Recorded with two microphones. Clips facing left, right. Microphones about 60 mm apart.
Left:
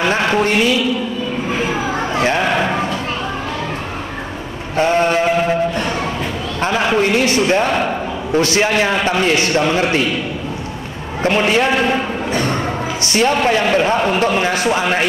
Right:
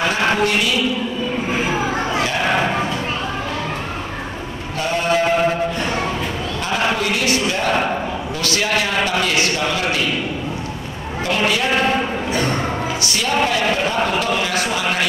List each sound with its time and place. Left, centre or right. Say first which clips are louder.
4.7 s a sound: left 7 dB; left
6.6 s a man's voice: left 5 dB; left
11.2 s a man's voice: left 5 dB; left
13.1 s a man's voice: left 6 dB; left